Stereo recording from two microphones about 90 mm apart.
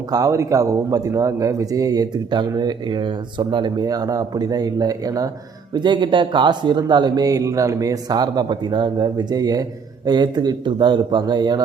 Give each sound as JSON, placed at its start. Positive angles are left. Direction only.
{"t": 0.1, "sound": "a man's voice", "side_deg": -40}
{"t": 5.7, "sound": "speech", "side_deg": -55}